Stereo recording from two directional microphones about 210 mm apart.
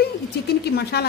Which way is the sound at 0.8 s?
50° left (ahead or behind).